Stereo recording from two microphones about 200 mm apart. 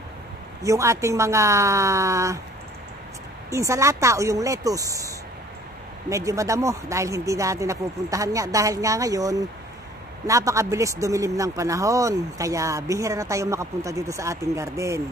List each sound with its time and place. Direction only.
0.6 s speech: 15° right (ahead or behind)
3.4 s speech: 15° right (ahead or behind)